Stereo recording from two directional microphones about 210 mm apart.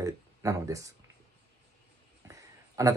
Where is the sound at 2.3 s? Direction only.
15° right (ahead or behind).